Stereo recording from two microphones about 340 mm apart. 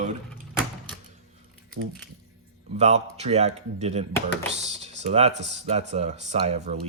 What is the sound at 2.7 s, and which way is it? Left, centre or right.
Speech, centre.